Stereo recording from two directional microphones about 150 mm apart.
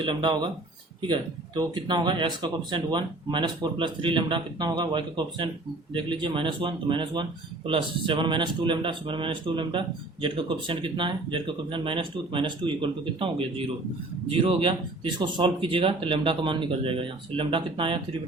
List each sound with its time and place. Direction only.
0.0 s speech: 30° right (ahead or behind)